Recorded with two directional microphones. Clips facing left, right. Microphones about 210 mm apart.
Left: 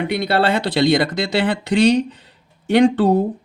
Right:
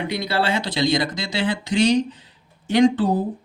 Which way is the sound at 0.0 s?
60° left (ahead or behind).